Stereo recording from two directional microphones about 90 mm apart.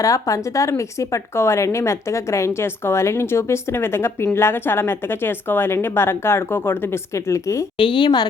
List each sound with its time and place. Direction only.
0.0 s a woman's voice: 40° left (ahead or behind)
7.8 s a woman's voice: 75° left (ahead or behind); by 8.3 s 55° left (ahead or behind)